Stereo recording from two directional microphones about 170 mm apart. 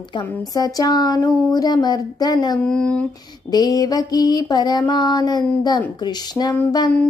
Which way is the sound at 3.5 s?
20° left (ahead or behind).